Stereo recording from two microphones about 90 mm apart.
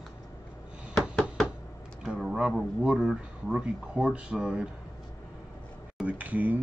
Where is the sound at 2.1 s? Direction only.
5° right (ahead or behind).